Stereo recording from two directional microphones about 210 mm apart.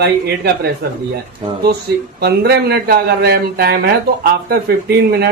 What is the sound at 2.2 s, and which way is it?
Speech, 50° right (ahead or behind).